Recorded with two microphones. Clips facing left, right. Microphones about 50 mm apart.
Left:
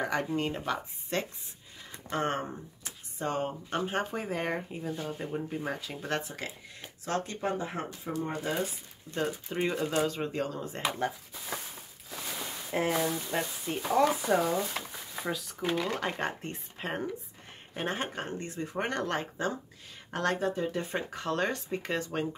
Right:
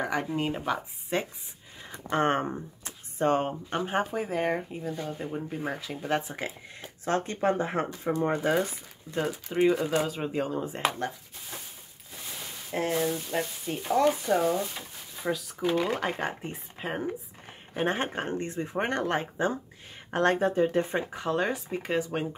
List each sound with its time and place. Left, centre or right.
0.0 s speech: centre
2.0 s speech: right
3.7 s speech: centre
4.0 s speech: centre
6.2 s speech: right
9.1 s speech: centre
10.9 s speech: centre
13.0 s speech: centre
17.8 s speech: right
20.9 s speech: centre